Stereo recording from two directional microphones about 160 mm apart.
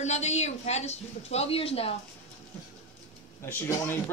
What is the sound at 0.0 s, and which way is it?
A woman's voice, 45° left (ahead or behind).